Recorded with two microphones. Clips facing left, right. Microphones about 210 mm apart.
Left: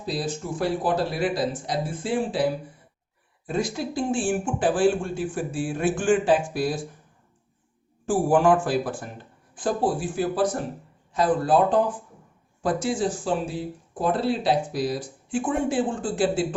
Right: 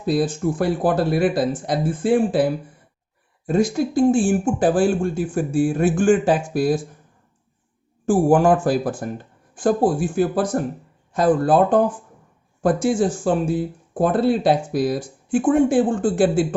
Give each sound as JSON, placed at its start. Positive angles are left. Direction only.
{"t": 0.0, "sound": "speech", "side_deg": -55}
{"t": 8.0, "sound": "speech", "side_deg": -45}